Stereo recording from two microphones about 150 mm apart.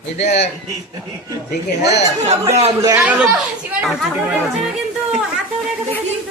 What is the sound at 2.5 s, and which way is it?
Speech, 45° right (ahead or behind).